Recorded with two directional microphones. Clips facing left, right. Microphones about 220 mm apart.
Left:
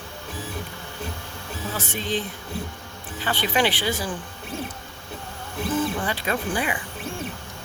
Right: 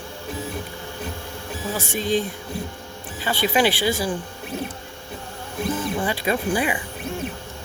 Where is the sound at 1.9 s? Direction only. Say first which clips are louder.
Right 6 dB; 45° right (ahead or behind).